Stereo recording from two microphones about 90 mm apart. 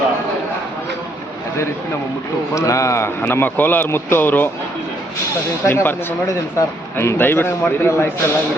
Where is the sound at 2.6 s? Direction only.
35° left (ahead or behind).